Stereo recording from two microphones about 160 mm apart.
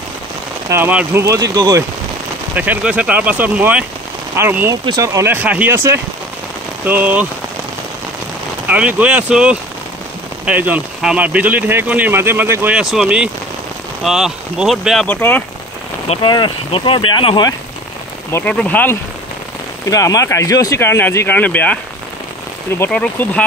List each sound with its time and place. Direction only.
0.7 s speech: 10° right (ahead or behind)
8.6 s speech: 10° right (ahead or behind); by 15.4 s 10° left (ahead or behind)
16.1 s speech: 30° left (ahead or behind)
18.3 s speech: 5° left (ahead or behind)
19.9 s speech: 20° left (ahead or behind)
22.8 s speech: 10° left (ahead or behind)